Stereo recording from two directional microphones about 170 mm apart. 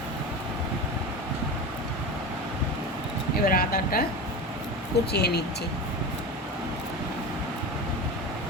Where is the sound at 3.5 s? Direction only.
60° left (ahead or behind).